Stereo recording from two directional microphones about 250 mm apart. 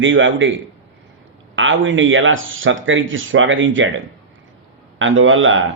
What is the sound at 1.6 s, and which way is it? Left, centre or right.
A man's voice, right.